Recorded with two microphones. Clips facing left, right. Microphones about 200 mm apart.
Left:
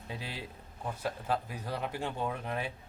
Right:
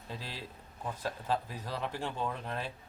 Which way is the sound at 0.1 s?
15° left (ahead or behind).